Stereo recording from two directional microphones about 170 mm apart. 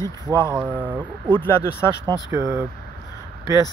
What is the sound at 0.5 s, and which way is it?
Speech, 10° right (ahead or behind).